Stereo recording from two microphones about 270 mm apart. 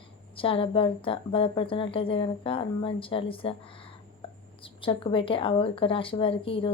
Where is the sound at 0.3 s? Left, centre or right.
Centre.